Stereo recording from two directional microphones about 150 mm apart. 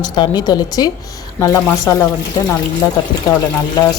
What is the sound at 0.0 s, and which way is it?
Speech, 25° left (ahead or behind).